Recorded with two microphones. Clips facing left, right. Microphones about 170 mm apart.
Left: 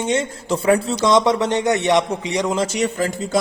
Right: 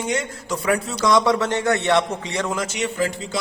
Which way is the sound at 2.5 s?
35° left (ahead or behind).